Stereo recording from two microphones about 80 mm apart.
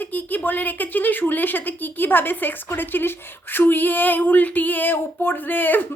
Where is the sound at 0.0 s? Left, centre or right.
Left.